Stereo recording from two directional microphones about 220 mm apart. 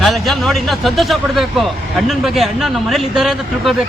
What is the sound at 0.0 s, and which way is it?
Speech, centre (ahead or behind).